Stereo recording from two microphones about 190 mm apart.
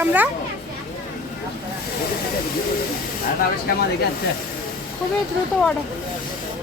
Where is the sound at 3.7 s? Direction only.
50° left (ahead or behind).